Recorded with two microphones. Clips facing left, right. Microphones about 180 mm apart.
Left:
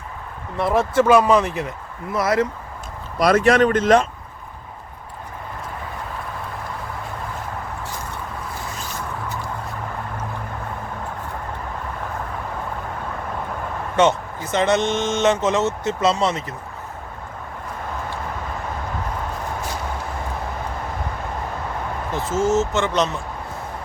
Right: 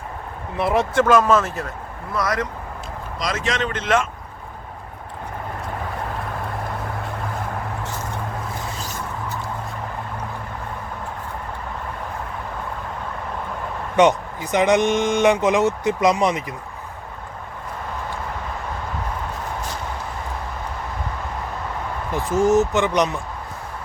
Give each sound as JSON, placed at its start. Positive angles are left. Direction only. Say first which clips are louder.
{"t": 0.6, "sound": "speech", "louder": "left 1 dB", "side_deg": 0}
{"t": 2.1, "sound": "speech", "louder": "left 4 dB", "side_deg": 25}
{"t": 3.2, "sound": "speech", "louder": "left 10 dB", "side_deg": 60}
{"t": 13.9, "sound": "speech", "louder": "right 2 dB", "side_deg": -15}
{"t": 22.1, "sound": "speech", "louder": "right 3 dB", "side_deg": -15}